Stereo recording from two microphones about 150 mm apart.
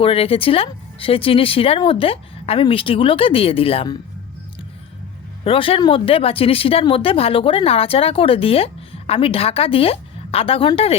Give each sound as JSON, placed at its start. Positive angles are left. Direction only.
{"t": 0.0, "sound": "speech", "side_deg": 40}
{"t": 5.5, "sound": "speech", "side_deg": 40}